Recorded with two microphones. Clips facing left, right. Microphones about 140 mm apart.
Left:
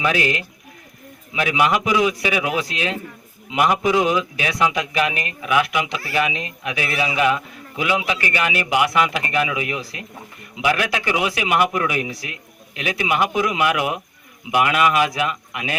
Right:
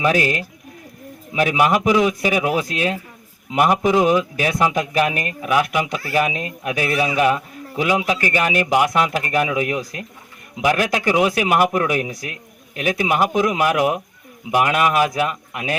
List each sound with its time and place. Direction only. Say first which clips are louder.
0.0 s speech: right 2 dB; 40° right (ahead or behind)